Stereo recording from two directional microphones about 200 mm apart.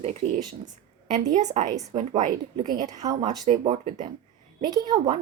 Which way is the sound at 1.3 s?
35° right (ahead or behind).